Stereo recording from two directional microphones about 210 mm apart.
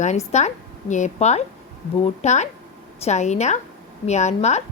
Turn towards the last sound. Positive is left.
turn(degrees=35)  # may be behind; listen again after turning